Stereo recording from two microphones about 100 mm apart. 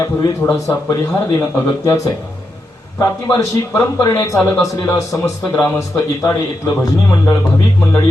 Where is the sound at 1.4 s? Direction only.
25° left (ahead or behind).